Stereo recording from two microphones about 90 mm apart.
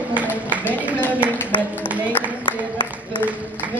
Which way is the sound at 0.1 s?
15° right (ahead or behind).